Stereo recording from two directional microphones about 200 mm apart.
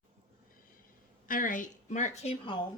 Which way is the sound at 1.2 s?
40° left (ahead or behind).